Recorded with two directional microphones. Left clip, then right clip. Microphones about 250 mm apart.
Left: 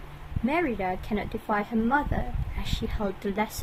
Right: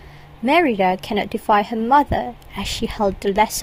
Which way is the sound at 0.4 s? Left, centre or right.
Right.